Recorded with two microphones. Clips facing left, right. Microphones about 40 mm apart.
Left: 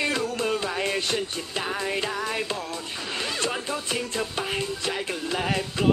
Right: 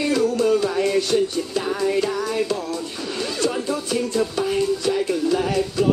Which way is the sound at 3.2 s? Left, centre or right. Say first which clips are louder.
Right 5 dB; left.